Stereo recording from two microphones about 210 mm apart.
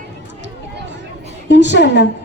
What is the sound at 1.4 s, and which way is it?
Speech, 55° left (ahead or behind).